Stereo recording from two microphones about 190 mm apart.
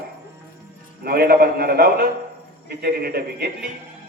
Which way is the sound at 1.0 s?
55° right (ahead or behind).